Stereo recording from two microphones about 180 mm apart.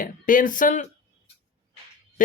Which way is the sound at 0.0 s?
50° left (ahead or behind).